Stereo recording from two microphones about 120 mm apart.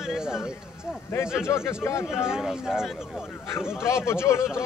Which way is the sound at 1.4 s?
20° left (ahead or behind).